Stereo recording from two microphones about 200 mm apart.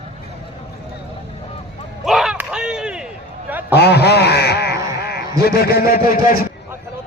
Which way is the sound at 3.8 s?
55° left (ahead or behind).